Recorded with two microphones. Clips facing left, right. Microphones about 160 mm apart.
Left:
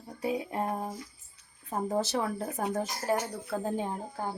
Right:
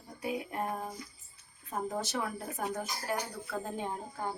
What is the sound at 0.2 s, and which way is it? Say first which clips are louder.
A woman's voice: left 4 dB; 30° left (ahead or behind).